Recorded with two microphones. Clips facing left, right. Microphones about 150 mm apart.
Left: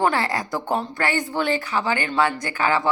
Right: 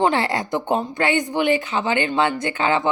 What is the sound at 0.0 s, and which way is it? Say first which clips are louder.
A woman's voice: right 2 dB; 25° right (ahead or behind).